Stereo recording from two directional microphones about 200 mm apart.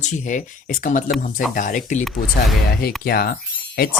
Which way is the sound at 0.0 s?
40° left (ahead or behind).